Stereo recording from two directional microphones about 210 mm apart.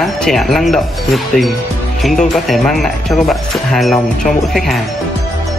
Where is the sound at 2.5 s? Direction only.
Centre (ahead or behind).